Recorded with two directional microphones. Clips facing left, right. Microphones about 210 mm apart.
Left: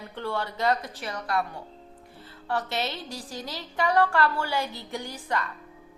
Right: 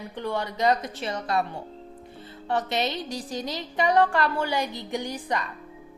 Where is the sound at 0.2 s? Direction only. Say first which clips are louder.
Right 2 dB; 15° right (ahead or behind).